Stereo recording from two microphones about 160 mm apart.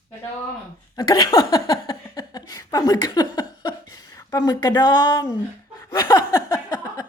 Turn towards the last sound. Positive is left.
turn(degrees=25)  # may be behind; listen again after turning